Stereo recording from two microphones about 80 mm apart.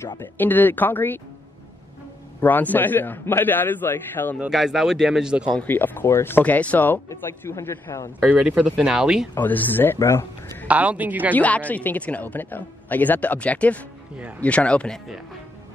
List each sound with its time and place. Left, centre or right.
0.2 s speech: left
2.4 s speech: left
4.5 s speech: centre
5.6 s speech: left
7.1 s a man's voice: left
8.7 s speech: centre
9.3 s speech: left
9.9 s a man's voice: left
10.7 s speech: centre
11.3 s speech: centre